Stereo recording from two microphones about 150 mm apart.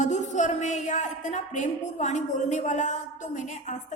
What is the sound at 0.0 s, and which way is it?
A woman's voice, 55° left (ahead or behind).